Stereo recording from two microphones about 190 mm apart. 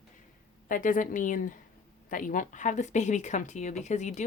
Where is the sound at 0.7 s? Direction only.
45° left (ahead or behind).